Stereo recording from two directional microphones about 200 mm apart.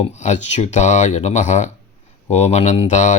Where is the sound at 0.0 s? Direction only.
35° left (ahead or behind).